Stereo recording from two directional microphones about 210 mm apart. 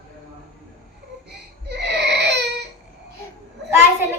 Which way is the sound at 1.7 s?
50° right (ahead or behind).